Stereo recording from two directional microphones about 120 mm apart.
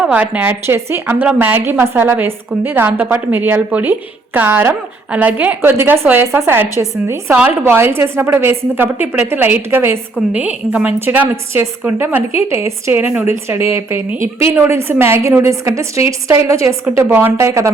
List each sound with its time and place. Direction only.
0.0 s a woman's voice: 10° right (ahead or behind)